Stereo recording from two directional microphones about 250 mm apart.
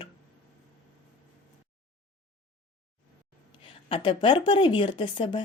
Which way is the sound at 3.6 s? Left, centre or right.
Centre.